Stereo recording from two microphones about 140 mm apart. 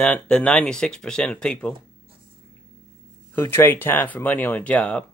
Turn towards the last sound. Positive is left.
turn(degrees=10)  # may be behind; listen again after turning